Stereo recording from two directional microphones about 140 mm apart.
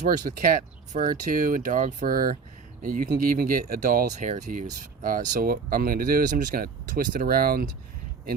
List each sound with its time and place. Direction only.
0.3 s speech: 70° right (ahead or behind); by 7.7 s 90° right